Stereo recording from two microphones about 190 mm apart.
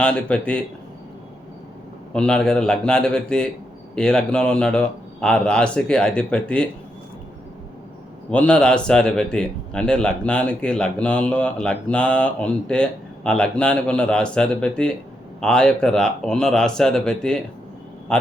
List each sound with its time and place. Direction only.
0.0 s a man's voice: 5° left (ahead or behind)
2.1 s a man's voice: 5° left (ahead or behind)
8.3 s a man's voice: 5° left (ahead or behind)